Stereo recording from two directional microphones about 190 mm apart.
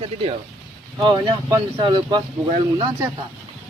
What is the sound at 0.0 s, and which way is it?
Speech, 30° right (ahead or behind).